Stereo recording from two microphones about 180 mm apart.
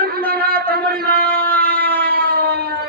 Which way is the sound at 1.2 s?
10° left (ahead or behind).